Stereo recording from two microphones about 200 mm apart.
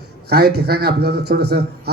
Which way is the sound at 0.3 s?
55° right (ahead or behind).